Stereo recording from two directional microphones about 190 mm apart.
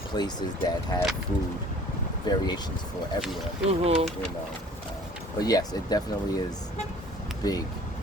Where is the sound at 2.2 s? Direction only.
20° left (ahead or behind).